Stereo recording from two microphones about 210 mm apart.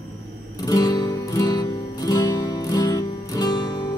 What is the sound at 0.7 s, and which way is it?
Music, 20° left (ahead or behind).